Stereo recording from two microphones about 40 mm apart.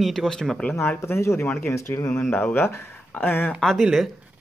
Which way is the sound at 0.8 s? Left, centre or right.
Left.